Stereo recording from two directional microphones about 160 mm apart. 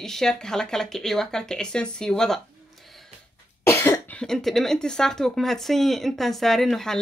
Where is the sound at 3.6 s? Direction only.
15° left (ahead or behind).